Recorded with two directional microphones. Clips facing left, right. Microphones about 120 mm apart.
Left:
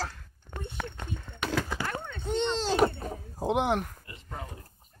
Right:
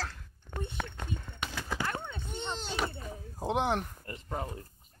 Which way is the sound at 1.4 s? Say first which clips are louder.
Left 12 dB; 90° left.